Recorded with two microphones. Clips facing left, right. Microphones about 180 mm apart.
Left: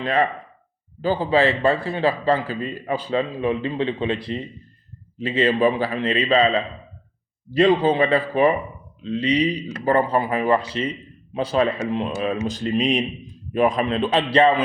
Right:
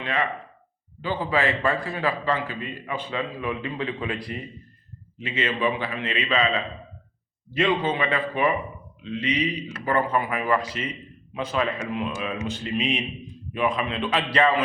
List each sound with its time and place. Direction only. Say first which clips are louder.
0.0 s a man's voice: left 6 dB; 35° left (ahead or behind)
7.5 s a man's voice: left 7 dB; 35° left (ahead or behind)